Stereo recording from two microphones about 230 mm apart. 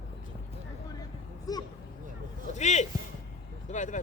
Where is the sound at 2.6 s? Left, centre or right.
Left.